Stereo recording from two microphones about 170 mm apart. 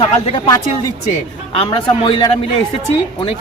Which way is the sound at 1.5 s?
30° left (ahead or behind).